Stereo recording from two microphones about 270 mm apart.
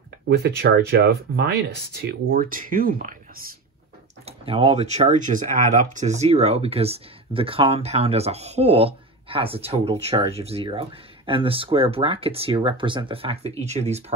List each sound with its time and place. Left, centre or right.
0.3 s speech: right